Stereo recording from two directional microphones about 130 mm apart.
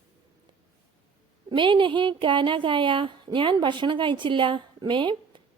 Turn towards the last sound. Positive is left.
turn(degrees=-40)  # may be behind; listen again after turning